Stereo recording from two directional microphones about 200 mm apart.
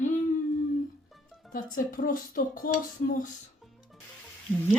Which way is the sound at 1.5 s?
45° left (ahead or behind).